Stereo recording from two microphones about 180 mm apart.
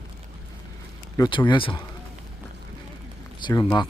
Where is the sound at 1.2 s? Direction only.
25° left (ahead or behind).